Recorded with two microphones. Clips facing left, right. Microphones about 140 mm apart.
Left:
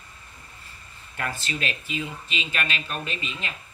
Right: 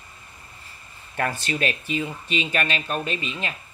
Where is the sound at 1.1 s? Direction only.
40° right (ahead or behind).